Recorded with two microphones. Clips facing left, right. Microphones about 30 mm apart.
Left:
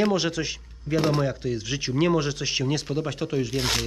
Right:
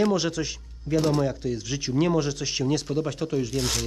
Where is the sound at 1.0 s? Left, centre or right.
Left.